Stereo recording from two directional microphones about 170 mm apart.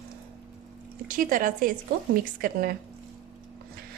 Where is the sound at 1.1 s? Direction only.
55° right (ahead or behind).